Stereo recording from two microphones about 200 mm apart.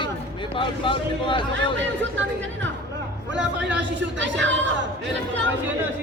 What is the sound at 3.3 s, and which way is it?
Speech, 65° right (ahead or behind).